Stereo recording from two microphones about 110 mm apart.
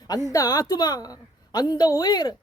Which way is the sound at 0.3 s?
30° left (ahead or behind).